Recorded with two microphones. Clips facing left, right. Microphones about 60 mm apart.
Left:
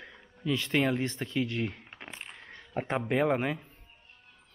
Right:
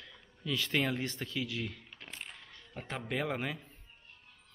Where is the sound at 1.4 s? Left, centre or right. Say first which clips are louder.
Left 6 dB; left.